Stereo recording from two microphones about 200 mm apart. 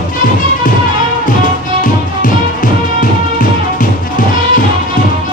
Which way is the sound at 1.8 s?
40° left (ahead or behind).